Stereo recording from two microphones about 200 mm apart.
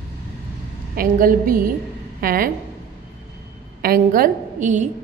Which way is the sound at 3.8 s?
45° right (ahead or behind).